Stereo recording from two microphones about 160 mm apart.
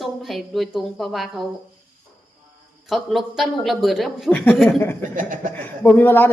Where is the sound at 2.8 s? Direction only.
Centre (ahead or behind).